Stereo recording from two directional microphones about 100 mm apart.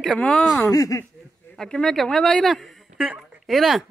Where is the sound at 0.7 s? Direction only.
35° left (ahead or behind).